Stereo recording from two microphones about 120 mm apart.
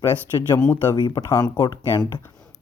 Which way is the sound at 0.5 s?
15° left (ahead or behind).